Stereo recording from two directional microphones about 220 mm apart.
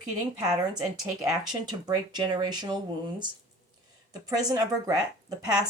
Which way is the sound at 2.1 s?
20° right (ahead or behind).